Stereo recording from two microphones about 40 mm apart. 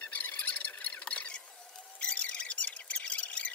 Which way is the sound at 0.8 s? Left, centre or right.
Left.